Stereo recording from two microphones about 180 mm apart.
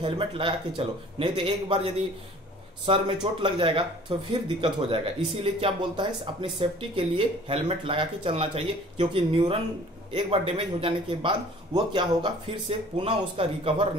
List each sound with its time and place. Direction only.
0.0 s speech: 30° right (ahead or behind)